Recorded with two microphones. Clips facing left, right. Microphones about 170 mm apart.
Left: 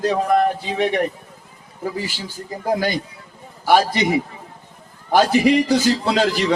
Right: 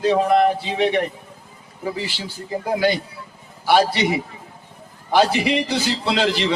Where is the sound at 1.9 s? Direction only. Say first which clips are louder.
Left 1 dB; 45° left (ahead or behind).